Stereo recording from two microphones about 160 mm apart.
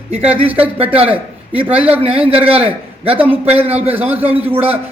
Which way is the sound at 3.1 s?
10° right (ahead or behind).